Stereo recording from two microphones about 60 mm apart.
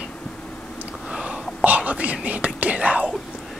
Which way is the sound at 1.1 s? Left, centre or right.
Centre.